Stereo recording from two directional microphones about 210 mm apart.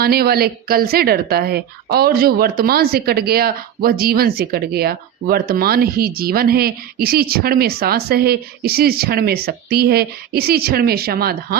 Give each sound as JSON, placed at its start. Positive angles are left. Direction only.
{"t": 0.0, "sound": "a woman's voice", "side_deg": -45}